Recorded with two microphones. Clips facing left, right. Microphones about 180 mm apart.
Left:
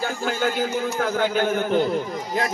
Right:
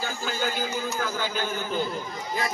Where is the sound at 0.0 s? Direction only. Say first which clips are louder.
Left 6 dB; 60° left (ahead or behind).